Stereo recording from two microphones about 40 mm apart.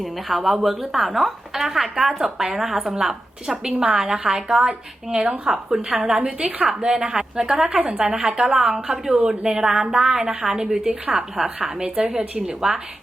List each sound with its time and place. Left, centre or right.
0.0 s a woman's voice: centre
6.2 s a woman's voice: right
7.7 s a woman's voice: right
8.2 s a woman's voice: centre
12.0 s a woman's voice: right